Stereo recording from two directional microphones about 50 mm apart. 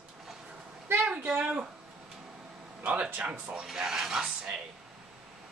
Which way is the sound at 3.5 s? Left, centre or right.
Centre.